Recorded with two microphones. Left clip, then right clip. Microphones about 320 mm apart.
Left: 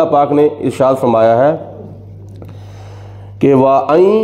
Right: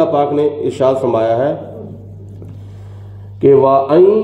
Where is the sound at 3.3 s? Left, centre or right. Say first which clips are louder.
Right 1 dB; left.